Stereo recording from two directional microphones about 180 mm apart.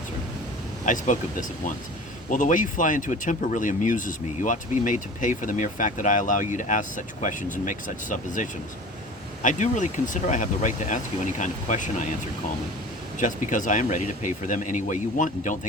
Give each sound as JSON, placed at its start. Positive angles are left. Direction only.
{"t": 0.9, "sound": "speech", "side_deg": 45}
{"t": 13.1, "sound": "speech", "side_deg": 45}